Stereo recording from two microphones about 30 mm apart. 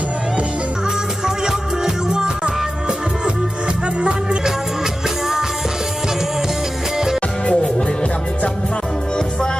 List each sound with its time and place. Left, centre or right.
1.2 s music: right
7.4 s music: left